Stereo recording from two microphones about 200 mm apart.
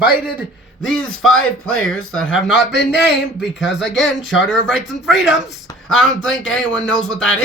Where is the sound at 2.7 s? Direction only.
55° left (ahead or behind).